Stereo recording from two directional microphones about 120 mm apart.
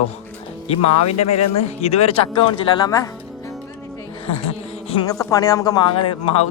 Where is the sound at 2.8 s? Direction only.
30° left (ahead or behind).